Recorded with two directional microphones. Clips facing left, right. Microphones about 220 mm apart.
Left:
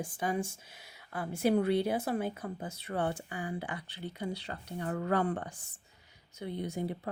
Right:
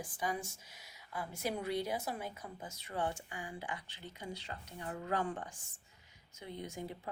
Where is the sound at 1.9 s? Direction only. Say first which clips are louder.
Left 8 dB; 55° left (ahead or behind).